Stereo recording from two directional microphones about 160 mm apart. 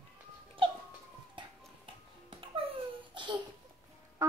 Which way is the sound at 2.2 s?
35° right (ahead or behind).